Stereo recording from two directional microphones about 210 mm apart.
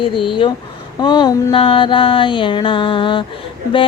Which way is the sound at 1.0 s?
20° left (ahead or behind).